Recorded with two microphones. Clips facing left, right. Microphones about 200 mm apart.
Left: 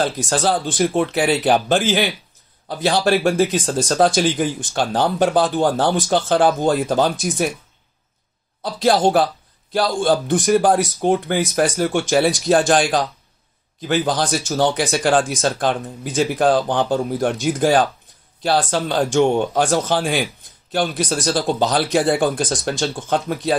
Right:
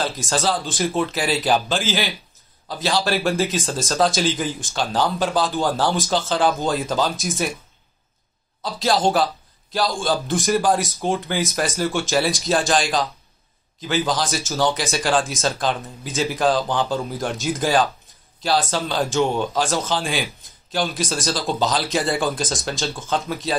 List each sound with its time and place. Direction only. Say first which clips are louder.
0.0 s speech: left 3 dB; 55° left (ahead or behind)
8.6 s speech: left 4 dB; 55° left (ahead or behind)